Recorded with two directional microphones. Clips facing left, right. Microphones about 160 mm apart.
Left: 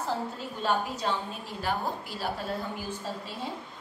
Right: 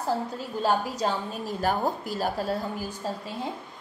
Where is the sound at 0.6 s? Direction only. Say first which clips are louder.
Right 4 dB; 40° right (ahead or behind).